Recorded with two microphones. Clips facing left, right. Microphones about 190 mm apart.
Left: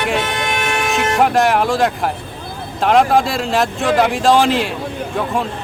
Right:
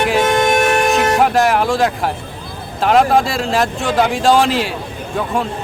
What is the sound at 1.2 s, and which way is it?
Speech, centre (ahead or behind).